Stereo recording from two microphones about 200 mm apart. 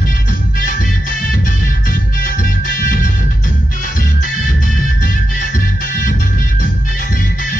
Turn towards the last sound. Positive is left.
turn(degrees=40)  # may be behind; listen again after turning